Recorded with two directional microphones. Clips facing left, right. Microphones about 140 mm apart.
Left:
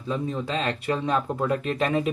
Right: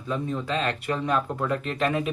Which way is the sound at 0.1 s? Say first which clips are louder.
Even; 30° left (ahead or behind).